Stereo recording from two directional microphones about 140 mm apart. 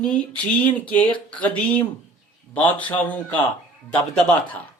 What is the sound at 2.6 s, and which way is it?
Speech, 35° left (ahead or behind).